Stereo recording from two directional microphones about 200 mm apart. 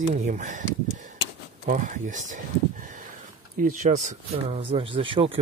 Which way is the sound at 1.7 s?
40° right (ahead or behind).